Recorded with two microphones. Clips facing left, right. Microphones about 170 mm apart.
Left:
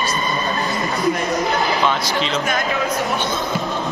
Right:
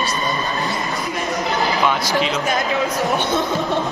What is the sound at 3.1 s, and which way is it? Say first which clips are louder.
Speech: right 3 dB; 20° right (ahead or behind).